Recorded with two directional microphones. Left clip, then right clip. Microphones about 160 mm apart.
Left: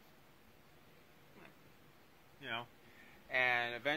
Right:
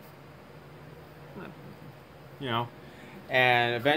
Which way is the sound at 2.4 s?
10° right (ahead or behind).